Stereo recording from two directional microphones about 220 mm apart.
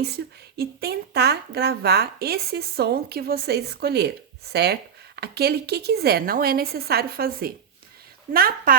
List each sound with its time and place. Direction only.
0.0 s a woman's voice: 45° right (ahead or behind)